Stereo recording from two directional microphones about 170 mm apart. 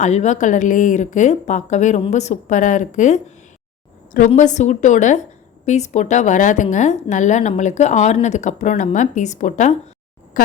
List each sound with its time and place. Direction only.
0.0 s a woman's voice: 45° left (ahead or behind)
4.4 s a woman's voice: 45° left (ahead or behind)